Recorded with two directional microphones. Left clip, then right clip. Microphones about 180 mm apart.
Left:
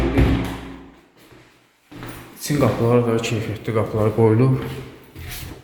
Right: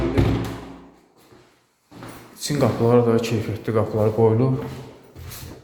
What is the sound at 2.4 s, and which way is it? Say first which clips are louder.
Speech: left 1 dB; centre (ahead or behind).